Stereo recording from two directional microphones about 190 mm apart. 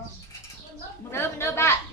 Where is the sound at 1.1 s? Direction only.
10° left (ahead or behind).